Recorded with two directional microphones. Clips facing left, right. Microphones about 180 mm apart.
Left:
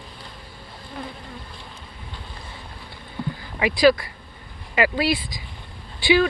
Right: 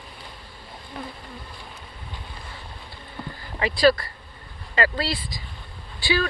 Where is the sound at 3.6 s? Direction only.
10° left (ahead or behind).